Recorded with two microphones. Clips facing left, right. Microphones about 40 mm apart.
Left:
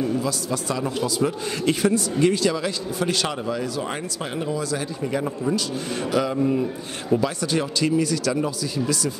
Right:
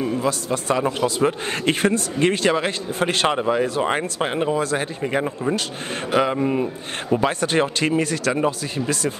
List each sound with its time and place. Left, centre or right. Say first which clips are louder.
0.0 s a man's voice: right 2 dB; right
5.2 s a man's voice: right 1 dB; right